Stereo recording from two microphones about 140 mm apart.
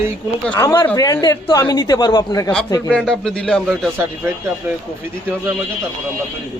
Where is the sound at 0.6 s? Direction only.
25° left (ahead or behind).